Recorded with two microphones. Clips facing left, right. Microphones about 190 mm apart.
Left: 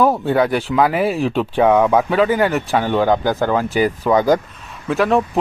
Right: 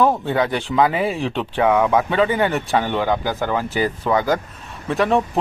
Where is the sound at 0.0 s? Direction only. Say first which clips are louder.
Left 3 dB; 10° left (ahead or behind).